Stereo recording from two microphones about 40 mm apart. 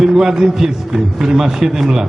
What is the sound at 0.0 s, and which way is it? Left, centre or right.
Speech, centre.